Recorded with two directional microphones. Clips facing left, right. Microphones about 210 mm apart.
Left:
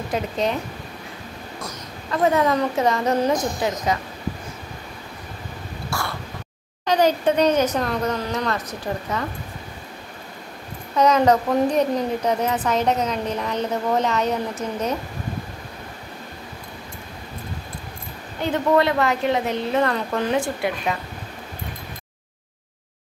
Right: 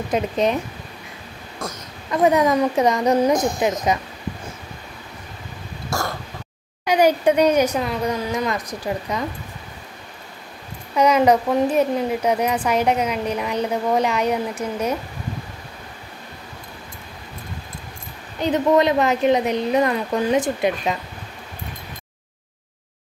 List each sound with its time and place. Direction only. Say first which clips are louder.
0.1 s a woman's voice: right 4 dB; 20° right (ahead or behind)
2.0 s a woman's voice: right 2 dB; 15° right (ahead or behind)
5.9 s throat clearing: right 4 dB; 45° right (ahead or behind)
6.8 s speech: right 2 dB; 10° right (ahead or behind)
11.0 s speech: right 1 dB; 10° right (ahead or behind)
18.4 s a woman's voice: right 2 dB; 20° right (ahead or behind)